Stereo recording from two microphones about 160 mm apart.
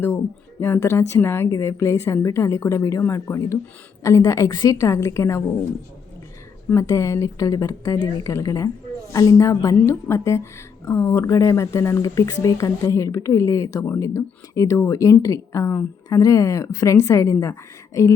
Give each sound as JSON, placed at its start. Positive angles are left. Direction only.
{"t": 0.6, "sound": "a woman's voice", "side_deg": 15}
{"t": 6.7, "sound": "speech", "side_deg": 20}